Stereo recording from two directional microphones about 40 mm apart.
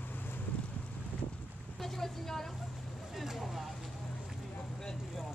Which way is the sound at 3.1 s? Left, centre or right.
Centre.